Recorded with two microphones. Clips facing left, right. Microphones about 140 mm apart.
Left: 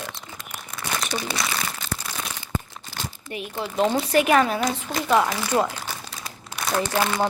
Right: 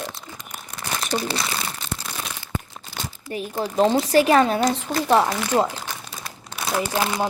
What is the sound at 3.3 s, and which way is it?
A woman's voice, 35° right (ahead or behind).